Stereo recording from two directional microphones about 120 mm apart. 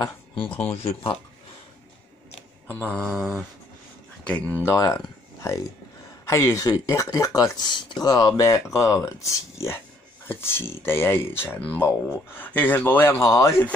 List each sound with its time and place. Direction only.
0.7 s speech: 55° left (ahead or behind)
2.9 s mantra: 5° left (ahead or behind)
4.3 s speech: 10° left (ahead or behind)
4.7 s speech: 25° left (ahead or behind)
13.2 s speech: 30° left (ahead or behind)